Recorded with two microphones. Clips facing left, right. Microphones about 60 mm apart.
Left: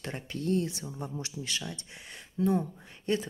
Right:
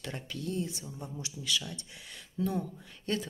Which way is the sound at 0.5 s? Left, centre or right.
Left.